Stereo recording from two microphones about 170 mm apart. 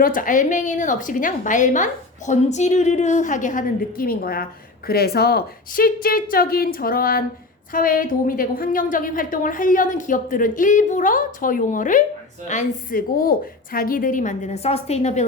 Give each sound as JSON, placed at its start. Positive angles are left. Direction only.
{"t": 0.0, "sound": "a woman's voice", "side_deg": 55}